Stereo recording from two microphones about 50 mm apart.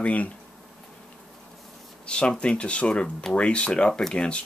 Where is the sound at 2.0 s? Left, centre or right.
Left.